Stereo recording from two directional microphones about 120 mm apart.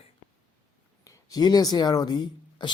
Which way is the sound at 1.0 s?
30° left (ahead or behind).